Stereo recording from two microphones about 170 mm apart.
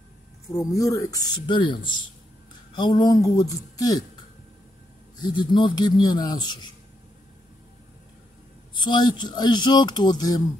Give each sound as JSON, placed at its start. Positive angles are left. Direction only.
{"t": 0.6, "sound": "speech", "side_deg": 20}
{"t": 2.8, "sound": "speech", "side_deg": 25}
{"t": 5.2, "sound": "speech", "side_deg": 30}
{"t": 8.7, "sound": "speech", "side_deg": 25}